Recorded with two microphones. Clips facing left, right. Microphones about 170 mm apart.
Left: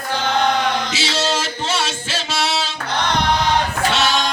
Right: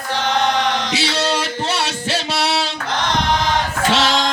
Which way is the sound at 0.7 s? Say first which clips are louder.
Right 1 dB; 75° right (ahead or behind).